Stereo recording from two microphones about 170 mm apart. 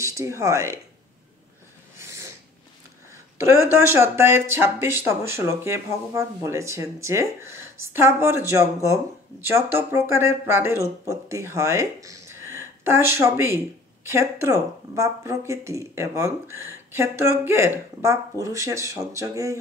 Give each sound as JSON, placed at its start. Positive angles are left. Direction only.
{"t": 0.0, "sound": "speech", "side_deg": -15}
{"t": 2.0, "sound": "snort", "side_deg": -15}
{"t": 3.3, "sound": "speech", "side_deg": -15}